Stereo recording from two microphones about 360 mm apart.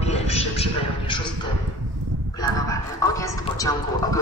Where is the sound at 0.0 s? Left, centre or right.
Centre.